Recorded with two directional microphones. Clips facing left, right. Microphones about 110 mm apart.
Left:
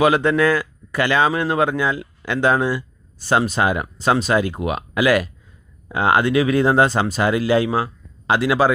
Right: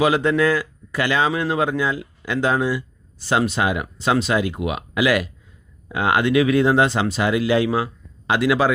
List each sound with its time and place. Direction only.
0.0 s speech: 60° left (ahead or behind); by 8.7 s 30° left (ahead or behind)